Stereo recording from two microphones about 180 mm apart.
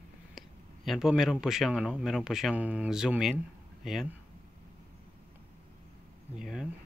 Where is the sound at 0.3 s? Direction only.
Centre (ahead or behind).